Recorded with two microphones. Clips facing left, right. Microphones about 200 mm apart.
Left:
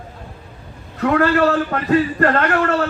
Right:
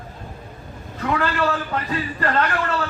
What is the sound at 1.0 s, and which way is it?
A man's voice, 55° left (ahead or behind).